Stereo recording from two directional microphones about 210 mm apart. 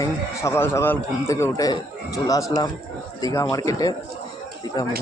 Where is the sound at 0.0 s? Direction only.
15° left (ahead or behind).